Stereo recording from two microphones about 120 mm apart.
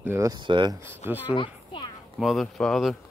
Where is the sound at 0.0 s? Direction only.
20° right (ahead or behind).